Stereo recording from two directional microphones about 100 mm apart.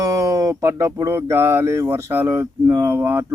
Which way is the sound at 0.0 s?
35° right (ahead or behind).